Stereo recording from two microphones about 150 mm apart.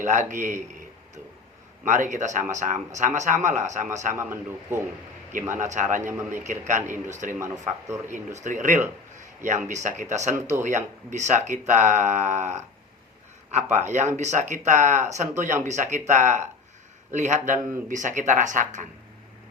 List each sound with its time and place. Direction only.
0.0 s a man's voice: 55° right (ahead or behind)
4.2 s a man's voice: 15° right (ahead or behind)
5.5 s speech: 55° right (ahead or behind)
7.3 s speech: 20° right (ahead or behind)
8.1 s speech: 55° right (ahead or behind)
9.1 s a sound: 55° right (ahead or behind)
9.6 s speech: 55° right (ahead or behind)